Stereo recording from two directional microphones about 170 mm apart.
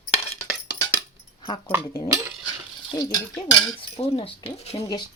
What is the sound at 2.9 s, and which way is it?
Speech, 20° left (ahead or behind).